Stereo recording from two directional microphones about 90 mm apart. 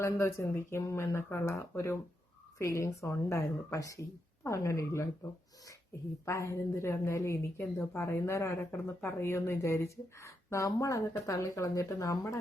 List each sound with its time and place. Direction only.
0.0 s a woman's voice: 30° left (ahead or behind)